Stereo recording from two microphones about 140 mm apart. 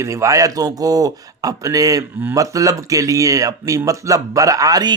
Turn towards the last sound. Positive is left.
turn(degrees=-25)  # may be behind; listen again after turning